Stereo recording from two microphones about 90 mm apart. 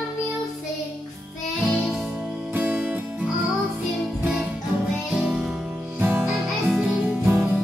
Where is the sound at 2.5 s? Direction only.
15° right (ahead or behind).